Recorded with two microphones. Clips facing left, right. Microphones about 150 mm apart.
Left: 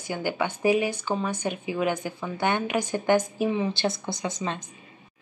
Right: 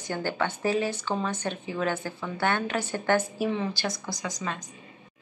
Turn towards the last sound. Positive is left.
turn(degrees=25)  # may be behind; listen again after turning